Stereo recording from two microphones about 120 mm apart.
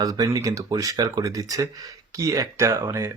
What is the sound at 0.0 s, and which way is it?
Speech, 30° right (ahead or behind).